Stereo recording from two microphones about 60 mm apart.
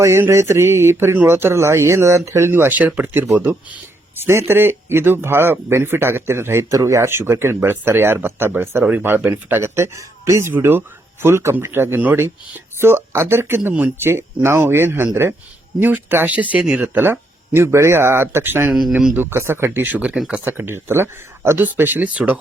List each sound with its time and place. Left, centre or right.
0.3 s speech: right
2.5 s speech: right
10.6 s speech: right
13.7 s speech: right
14.0 s speech: right
17.0 s speech: right
18.7 s speech: centre
19.1 s speech: right
21.6 s speech: right